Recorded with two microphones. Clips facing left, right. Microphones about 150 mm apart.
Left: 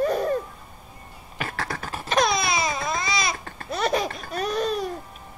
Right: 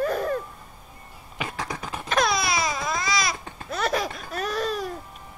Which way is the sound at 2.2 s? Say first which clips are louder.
Left 1 dB; centre (ahead or behind).